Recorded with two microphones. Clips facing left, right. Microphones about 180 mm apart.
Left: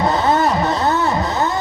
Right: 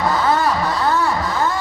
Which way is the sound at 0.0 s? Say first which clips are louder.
Left 2 dB; 25° left (ahead or behind).